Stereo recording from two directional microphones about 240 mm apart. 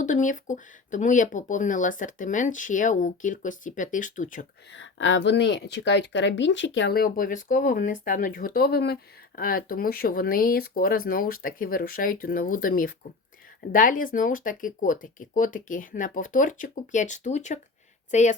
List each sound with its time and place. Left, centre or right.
0.0 s speech: left
4.7 s a woman's voice: left